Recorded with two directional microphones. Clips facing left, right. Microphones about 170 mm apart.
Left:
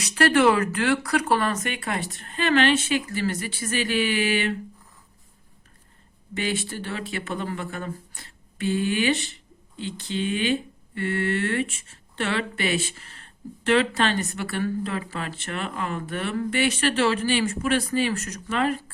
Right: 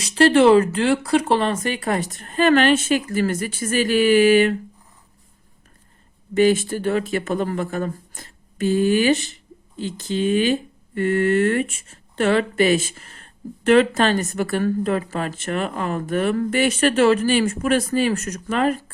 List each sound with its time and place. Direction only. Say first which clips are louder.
0.0 s speech: right 5 dB; 30° right (ahead or behind); by 4.5 s 45° right (ahead or behind)
6.3 s speech: right 11 dB; 45° right (ahead or behind)